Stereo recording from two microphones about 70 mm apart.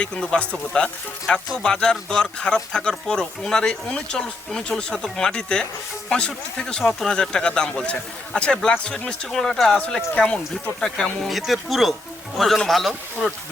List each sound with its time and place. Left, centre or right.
0.0 s speech: centre